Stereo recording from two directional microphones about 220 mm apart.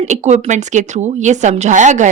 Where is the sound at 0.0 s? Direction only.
30° right (ahead or behind).